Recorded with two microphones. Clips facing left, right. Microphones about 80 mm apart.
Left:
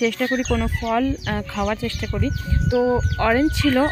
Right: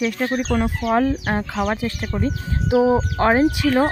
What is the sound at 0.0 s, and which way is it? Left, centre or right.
Speech, centre.